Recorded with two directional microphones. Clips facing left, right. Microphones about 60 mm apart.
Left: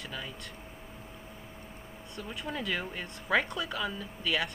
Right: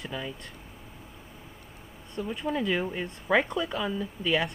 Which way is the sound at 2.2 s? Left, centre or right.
Centre.